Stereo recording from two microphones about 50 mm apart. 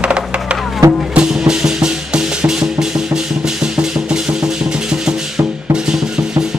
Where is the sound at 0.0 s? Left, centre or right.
Right.